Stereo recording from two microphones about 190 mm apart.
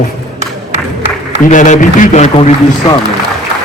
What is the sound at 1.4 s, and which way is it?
A man's voice, 40° left (ahead or behind).